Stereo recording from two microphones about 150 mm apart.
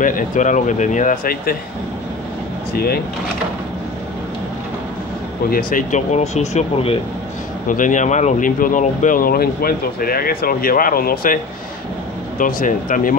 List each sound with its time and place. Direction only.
0.0 s speech: 60° left (ahead or behind); by 1.6 s 75° left (ahead or behind)
2.7 s speech: 90° left
5.5 s speech: 70° left (ahead or behind); by 7.0 s 40° left (ahead or behind)
7.6 s speech: 60° left (ahead or behind)
12.4 s speech: 65° left (ahead or behind)